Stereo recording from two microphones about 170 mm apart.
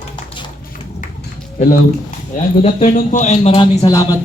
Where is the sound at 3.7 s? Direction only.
20° left (ahead or behind).